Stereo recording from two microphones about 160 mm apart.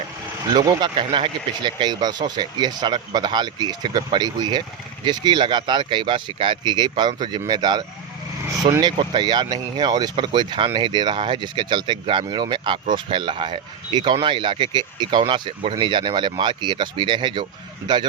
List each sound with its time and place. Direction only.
0.5 s speech: 25° right (ahead or behind)